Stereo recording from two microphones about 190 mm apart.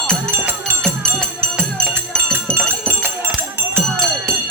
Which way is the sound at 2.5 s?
10° right (ahead or behind).